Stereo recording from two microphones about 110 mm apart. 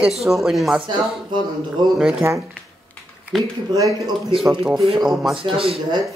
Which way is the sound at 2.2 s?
25° right (ahead or behind).